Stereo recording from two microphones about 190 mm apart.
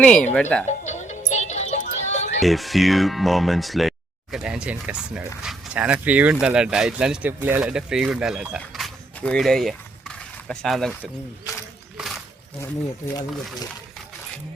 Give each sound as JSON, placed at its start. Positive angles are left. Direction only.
{"t": 0.0, "sound": "speech", "side_deg": 5}
{"t": 0.7, "sound": "music", "side_deg": 40}
{"t": 2.4, "sound": "speech", "side_deg": 0}
{"t": 8.5, "sound": "a sound", "side_deg": 0}
{"t": 11.9, "sound": "wild animals", "side_deg": 0}